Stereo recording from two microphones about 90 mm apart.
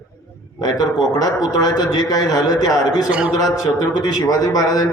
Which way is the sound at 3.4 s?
45° left (ahead or behind).